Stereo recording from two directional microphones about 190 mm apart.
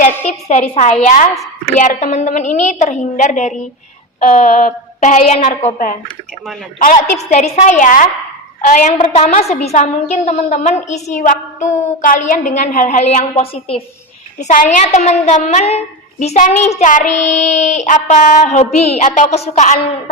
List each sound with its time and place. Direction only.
0.0 s a woman's voice: 40° left (ahead or behind)
14.4 s a woman's voice: 40° left (ahead or behind)